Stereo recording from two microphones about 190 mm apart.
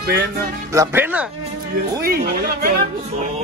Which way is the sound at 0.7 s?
15° right (ahead or behind).